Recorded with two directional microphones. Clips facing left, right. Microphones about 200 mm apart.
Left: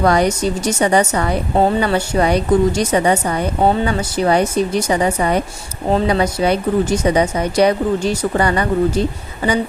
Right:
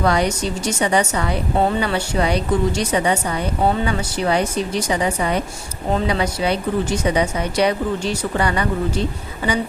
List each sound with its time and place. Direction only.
0.0 s a woman's voice: 45° left (ahead or behind)